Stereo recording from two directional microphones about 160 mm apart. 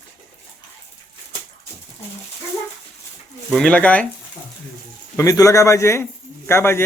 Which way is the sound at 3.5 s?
5° left (ahead or behind).